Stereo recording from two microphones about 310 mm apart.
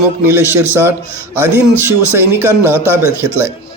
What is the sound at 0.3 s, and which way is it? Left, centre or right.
Speech, centre.